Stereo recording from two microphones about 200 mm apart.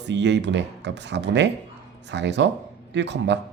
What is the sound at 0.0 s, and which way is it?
Speech, 60° right (ahead or behind).